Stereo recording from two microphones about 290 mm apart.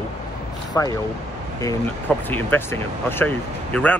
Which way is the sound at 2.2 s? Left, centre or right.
Centre.